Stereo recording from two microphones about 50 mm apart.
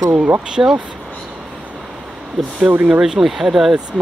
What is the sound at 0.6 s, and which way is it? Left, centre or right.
Speech, right.